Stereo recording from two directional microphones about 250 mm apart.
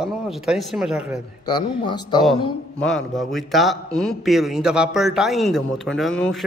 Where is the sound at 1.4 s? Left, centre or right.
Centre.